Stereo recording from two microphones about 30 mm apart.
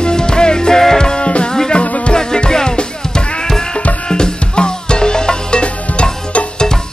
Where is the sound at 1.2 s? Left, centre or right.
Left.